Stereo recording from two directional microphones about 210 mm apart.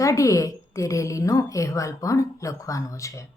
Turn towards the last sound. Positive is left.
turn(degrees=15)  # may be behind; listen again after turning